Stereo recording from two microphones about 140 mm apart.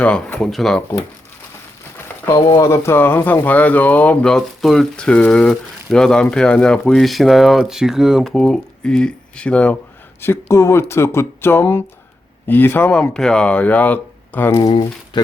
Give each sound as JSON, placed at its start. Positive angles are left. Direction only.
{"t": 0.0, "sound": "speech", "side_deg": 10}
{"t": 2.6, "sound": "speech", "side_deg": 20}
{"t": 10.2, "sound": "speech", "side_deg": 20}
{"t": 14.6, "sound": "speech", "side_deg": 30}